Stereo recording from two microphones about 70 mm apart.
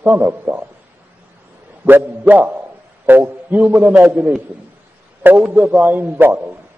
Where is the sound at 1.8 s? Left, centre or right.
Right.